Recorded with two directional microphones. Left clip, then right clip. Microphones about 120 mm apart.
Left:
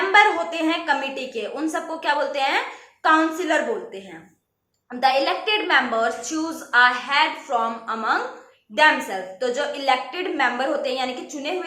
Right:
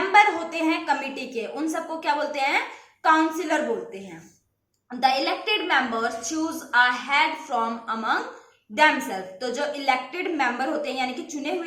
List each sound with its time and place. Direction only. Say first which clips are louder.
0.1 s a sound: left 2 dB; 30° right (ahead or behind)
3.0 s a woman's voice: left 2 dB; 35° right (ahead or behind)
4.9 s a woman's voice: left 3 dB; 35° right (ahead or behind)